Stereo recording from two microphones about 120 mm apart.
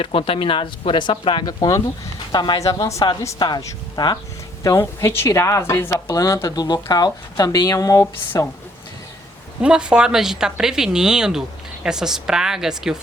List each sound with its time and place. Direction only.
0.0 s a woman's voice: 45° left (ahead or behind); by 3.1 s 25° left (ahead or behind)
3.3 s a woman's voice: 35° left (ahead or behind)
9.6 s a woman's voice: 5° right (ahead or behind)